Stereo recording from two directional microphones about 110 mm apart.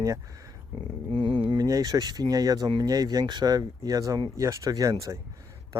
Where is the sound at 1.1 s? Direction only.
45° right (ahead or behind).